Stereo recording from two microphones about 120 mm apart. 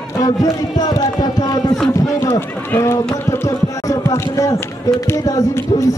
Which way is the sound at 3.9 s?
25° left (ahead or behind).